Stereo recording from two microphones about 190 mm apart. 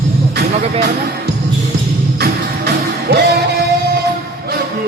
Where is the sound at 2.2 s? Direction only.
60° right (ahead or behind).